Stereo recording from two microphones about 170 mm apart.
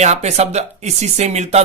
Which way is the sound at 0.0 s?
40° right (ahead or behind).